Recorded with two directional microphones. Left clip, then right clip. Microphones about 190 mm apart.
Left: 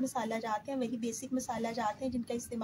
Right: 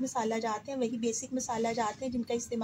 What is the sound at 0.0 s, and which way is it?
Speech, 25° right (ahead or behind).